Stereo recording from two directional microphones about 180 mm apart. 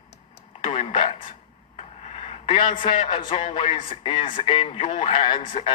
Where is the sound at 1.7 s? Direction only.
35° left (ahead or behind).